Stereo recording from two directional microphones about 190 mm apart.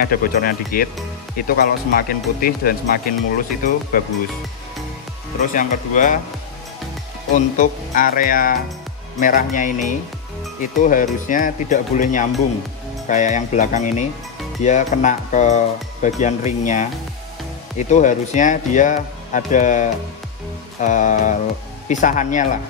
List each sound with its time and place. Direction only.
0.0 s speech: 50° left (ahead or behind)
5.4 s speech: 45° left (ahead or behind)
7.3 s speech: 45° left (ahead or behind)